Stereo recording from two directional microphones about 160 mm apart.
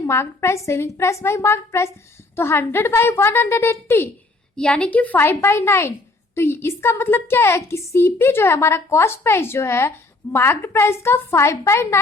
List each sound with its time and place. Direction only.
0.1 s a woman's voice: 15° left (ahead or behind)